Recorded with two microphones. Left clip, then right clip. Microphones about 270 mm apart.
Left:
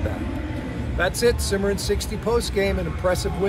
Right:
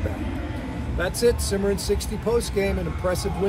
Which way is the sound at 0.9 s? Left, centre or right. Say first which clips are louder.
Left 1 dB; centre.